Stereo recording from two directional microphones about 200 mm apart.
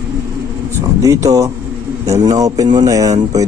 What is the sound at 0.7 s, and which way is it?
A man's voice, 15° right (ahead or behind).